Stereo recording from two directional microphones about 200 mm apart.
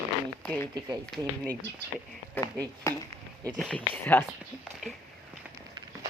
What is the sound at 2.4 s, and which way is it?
Speech, 10° left (ahead or behind).